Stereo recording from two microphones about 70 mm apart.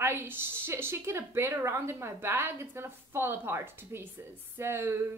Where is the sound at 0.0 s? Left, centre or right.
Right.